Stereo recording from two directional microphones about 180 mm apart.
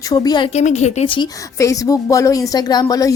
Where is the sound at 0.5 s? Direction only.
40° left (ahead or behind).